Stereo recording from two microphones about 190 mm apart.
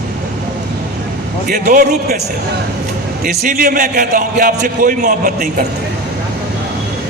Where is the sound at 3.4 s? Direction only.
50° right (ahead or behind).